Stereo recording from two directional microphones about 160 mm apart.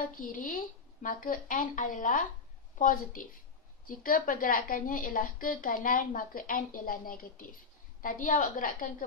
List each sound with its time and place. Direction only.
0.2 s a woman's voice: 60° left (ahead or behind)